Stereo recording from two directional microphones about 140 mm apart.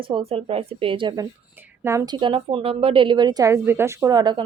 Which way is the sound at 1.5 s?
15° right (ahead or behind).